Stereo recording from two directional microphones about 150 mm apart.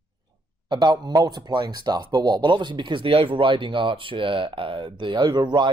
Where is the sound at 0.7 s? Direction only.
30° right (ahead or behind).